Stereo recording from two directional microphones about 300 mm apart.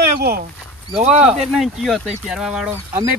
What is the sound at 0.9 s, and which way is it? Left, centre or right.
Speech, centre.